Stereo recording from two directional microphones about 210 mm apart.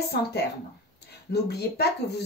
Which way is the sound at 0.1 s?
50° left (ahead or behind).